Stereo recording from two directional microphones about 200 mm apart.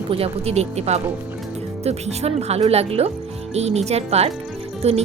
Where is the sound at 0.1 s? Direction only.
30° right (ahead or behind).